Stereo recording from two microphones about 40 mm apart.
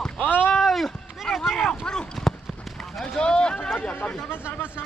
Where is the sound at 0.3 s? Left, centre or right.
Left.